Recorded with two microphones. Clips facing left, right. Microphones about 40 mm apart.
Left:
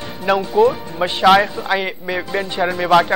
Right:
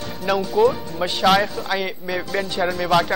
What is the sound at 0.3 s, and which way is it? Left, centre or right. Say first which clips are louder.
Speech: left 3 dB; centre.